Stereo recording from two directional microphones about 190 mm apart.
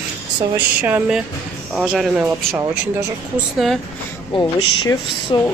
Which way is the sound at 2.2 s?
10° right (ahead or behind).